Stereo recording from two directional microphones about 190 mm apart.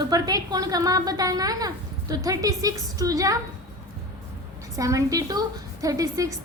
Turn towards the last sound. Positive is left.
turn(degrees=-15)  # may be behind; listen again after turning